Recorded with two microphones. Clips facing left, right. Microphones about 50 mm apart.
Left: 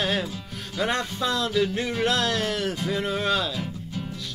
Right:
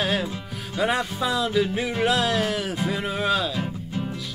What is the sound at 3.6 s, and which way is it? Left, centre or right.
Music, right.